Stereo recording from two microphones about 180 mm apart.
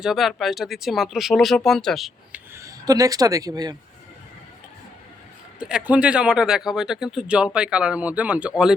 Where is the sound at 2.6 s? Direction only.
20° right (ahead or behind).